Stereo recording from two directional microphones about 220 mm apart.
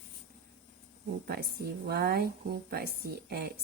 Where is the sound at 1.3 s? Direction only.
45° right (ahead or behind).